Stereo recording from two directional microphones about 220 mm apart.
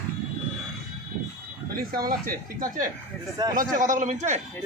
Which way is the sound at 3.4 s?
15° right (ahead or behind).